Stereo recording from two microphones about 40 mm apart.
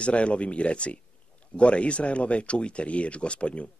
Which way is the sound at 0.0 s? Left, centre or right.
Left.